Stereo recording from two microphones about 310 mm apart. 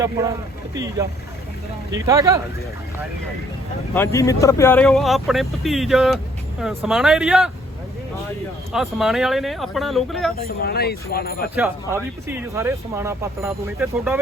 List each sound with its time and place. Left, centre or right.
0.0 s speech: centre
3.9 s speech: centre
8.7 s speech: centre
10.4 s speech: left
11.5 s speech: centre